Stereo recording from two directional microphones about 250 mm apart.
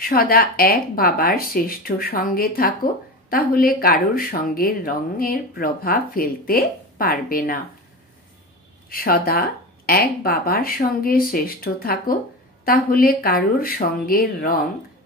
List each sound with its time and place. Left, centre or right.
0.0 s speech: left
8.8 s speech: left